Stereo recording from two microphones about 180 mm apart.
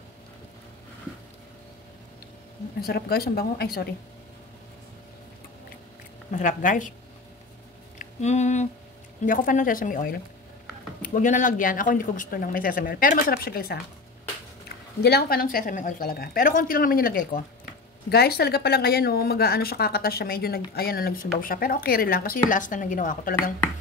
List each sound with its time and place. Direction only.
2.8 s a woman's voice: 60° left (ahead or behind)
6.3 s speech: 45° left (ahead or behind)
8.0 s speech: 40° left (ahead or behind); by 13.7 s 55° left (ahead or behind)
15.0 s a woman's voice: 65° left (ahead or behind); by 23.3 s 50° left (ahead or behind)